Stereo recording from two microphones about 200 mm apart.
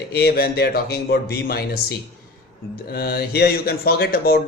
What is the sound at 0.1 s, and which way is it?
Speech, 55° left (ahead or behind).